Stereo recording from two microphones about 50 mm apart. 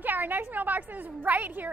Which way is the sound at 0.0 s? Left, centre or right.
Right.